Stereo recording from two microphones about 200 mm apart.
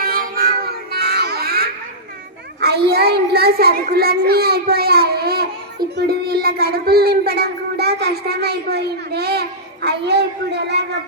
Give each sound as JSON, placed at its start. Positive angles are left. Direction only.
{"t": 0.0, "sound": "child singing", "side_deg": -45}